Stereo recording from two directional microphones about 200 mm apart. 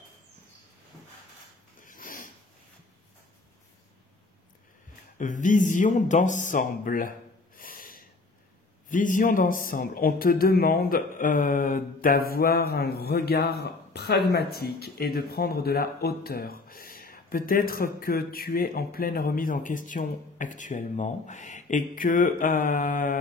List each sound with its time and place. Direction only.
1.9 s snort: 45° left (ahead or behind)
5.2 s speech: 40° left (ahead or behind)